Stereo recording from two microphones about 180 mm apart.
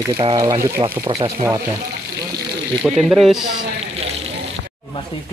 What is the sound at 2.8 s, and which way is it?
Speech, 5° right (ahead or behind).